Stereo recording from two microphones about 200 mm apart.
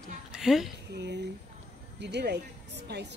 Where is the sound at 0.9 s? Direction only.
60° right (ahead or behind).